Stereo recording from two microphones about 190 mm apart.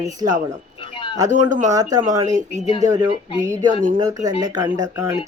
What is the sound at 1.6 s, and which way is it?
Speech, 20° right (ahead or behind).